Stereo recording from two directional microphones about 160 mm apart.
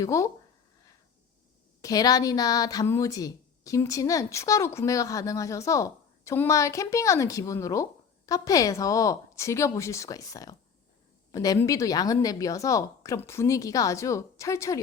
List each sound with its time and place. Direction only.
0.0 s a woman's voice: 20° left (ahead or behind)
1.8 s a woman's voice: 25° left (ahead or behind)